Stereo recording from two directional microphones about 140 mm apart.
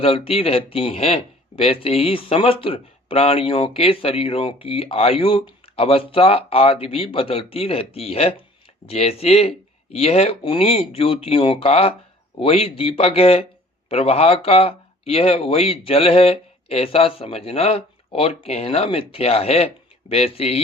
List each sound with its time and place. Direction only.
0.0 s speech: 40° left (ahead or behind)